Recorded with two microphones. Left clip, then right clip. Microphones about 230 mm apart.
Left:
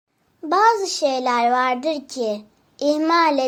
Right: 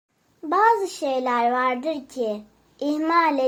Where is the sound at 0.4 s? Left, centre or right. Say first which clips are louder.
Left 2 dB; left.